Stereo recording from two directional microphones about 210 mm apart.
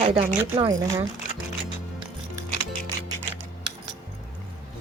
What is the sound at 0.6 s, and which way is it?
Speech, 15° right (ahead or behind).